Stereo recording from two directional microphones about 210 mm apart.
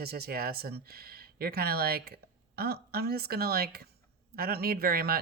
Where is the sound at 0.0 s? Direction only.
50° right (ahead or behind).